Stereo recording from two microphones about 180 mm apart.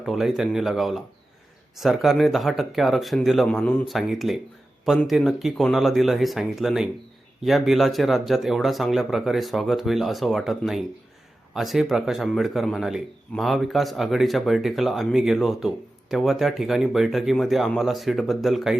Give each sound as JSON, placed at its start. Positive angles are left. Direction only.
{"t": 0.0, "sound": "a man's voice", "side_deg": 0}